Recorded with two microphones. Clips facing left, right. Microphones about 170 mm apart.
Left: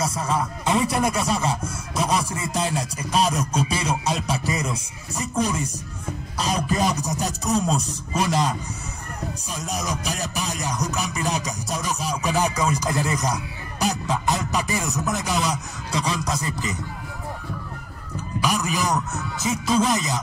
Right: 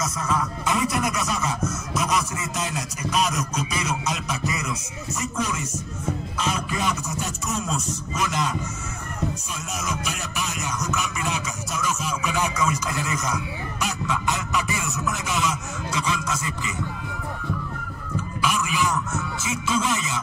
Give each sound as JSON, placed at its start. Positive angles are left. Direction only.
{"t": 0.0, "sound": "music", "side_deg": 30}
{"t": 2.0, "sound": "a sound", "side_deg": 30}
{"t": 5.3, "sound": "music", "side_deg": 35}
{"t": 6.3, "sound": "a sound", "side_deg": 35}
{"t": 9.8, "sound": "music", "side_deg": 35}
{"t": 18.1, "sound": "music", "side_deg": 40}